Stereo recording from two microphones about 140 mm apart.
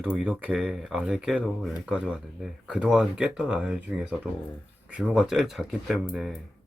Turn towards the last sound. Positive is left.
turn(degrees=0)  # may be behind; listen again after turning